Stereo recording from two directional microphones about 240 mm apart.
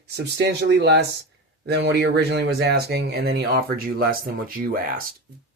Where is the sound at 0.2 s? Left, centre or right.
Right.